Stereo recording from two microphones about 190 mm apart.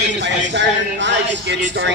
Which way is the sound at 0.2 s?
70° right (ahead or behind).